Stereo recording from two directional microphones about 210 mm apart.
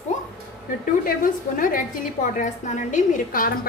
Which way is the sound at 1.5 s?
40° left (ahead or behind).